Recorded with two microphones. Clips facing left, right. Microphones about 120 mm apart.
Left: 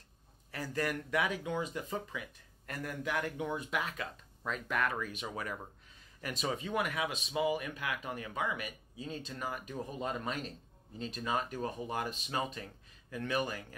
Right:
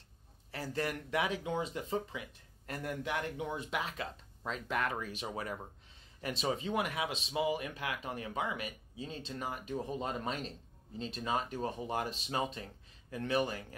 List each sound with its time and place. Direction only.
0.5 s speech: 30° right (ahead or behind)